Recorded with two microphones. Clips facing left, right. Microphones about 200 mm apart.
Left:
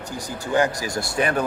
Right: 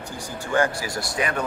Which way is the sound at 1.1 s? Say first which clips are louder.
Left 4 dB; 30° left (ahead or behind).